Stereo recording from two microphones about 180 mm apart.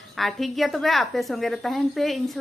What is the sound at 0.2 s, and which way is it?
A woman's voice, centre (ahead or behind).